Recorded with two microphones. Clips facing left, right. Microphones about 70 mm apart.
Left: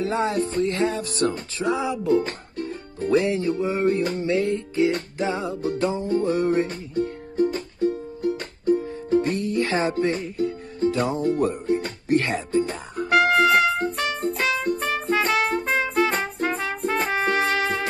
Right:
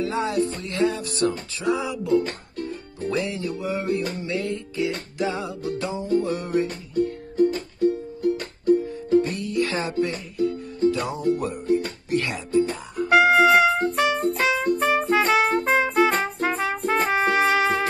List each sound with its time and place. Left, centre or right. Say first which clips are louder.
0.0 s music: even; left
1.3 s music: even; left
7.8 s music: right 2 dB; left
11.3 s speech: left 1 dB; left
12.1 s music: left 4 dB; left
13.2 s music: right 2 dB; centre